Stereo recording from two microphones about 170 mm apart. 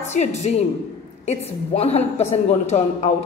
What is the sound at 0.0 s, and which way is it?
A woman's voice, 45° left (ahead or behind).